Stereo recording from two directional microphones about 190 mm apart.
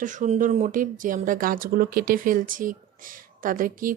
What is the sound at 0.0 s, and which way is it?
Speech, 40° right (ahead or behind).